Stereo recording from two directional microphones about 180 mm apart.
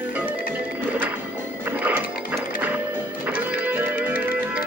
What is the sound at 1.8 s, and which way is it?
Music, 10° right (ahead or behind).